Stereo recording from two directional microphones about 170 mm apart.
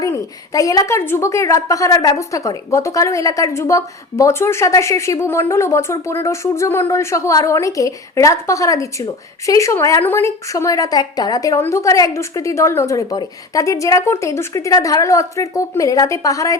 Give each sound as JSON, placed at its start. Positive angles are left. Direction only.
{"t": 0.0, "sound": "a woman's voice", "side_deg": 20}